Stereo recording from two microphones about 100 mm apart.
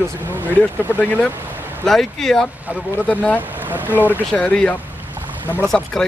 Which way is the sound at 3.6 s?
20° right (ahead or behind).